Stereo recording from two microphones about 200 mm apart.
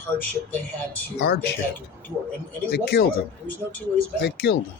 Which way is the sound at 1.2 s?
50° left (ahead or behind).